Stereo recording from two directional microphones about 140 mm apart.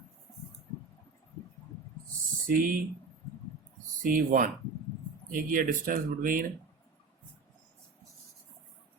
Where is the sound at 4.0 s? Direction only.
80° right.